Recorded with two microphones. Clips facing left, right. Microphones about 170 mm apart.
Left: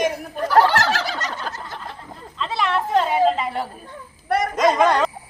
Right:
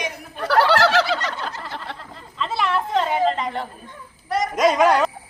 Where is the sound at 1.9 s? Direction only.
75° right (ahead or behind).